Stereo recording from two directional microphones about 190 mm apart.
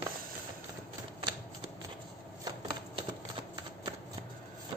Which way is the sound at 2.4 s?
25° right (ahead or behind).